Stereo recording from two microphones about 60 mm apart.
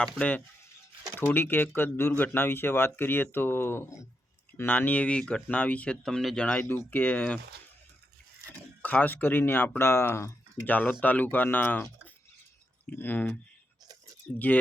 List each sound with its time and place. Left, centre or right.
0.0 s speech: left
1.2 s speech: left
8.8 s speech: left
14.3 s speech: left